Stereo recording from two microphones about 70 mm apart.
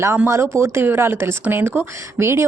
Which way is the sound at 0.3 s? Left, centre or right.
Right.